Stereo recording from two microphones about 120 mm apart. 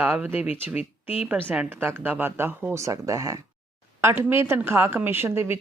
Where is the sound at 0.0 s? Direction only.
10° right (ahead or behind).